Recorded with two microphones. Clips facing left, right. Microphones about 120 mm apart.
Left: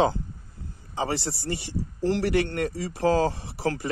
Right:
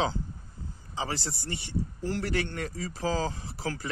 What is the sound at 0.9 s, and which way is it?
Speech, 65° left (ahead or behind).